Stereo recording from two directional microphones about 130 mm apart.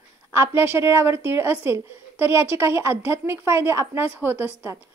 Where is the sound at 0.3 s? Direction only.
20° right (ahead or behind).